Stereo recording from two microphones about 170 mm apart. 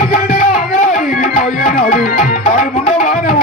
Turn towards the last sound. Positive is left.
turn(degrees=50)  # may be behind; listen again after turning